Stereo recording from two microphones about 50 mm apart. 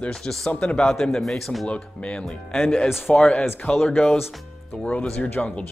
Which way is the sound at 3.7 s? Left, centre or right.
Centre.